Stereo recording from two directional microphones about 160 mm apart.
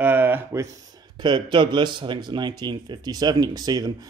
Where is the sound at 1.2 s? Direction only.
30° right (ahead or behind).